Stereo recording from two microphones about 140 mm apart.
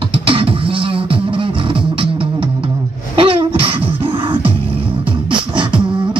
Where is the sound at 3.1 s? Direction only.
40° right (ahead or behind).